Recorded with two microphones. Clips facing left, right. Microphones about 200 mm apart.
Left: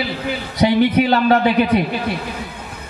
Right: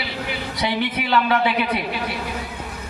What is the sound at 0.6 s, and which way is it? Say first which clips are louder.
A man's voice: left 11 dB; 40° left (ahead or behind).